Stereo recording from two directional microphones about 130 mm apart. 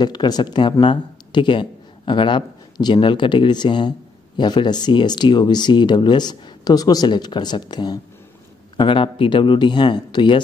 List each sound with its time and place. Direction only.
0.0 s speech: 35° left (ahead or behind)